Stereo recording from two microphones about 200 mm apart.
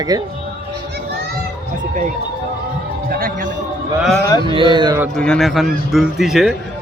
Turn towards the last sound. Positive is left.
turn(degrees=0)  # may be behind; listen again after turning